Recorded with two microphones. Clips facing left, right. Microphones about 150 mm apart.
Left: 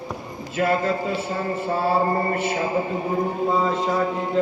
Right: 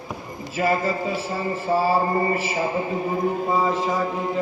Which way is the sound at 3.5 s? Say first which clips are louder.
Left 1 dB; 5° right (ahead or behind).